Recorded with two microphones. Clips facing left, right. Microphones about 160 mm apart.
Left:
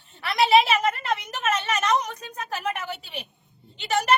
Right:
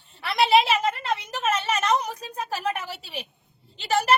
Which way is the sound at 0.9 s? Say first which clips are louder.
Even; 30° right (ahead or behind).